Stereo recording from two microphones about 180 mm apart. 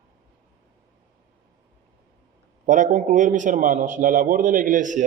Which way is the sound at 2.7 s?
45° right (ahead or behind).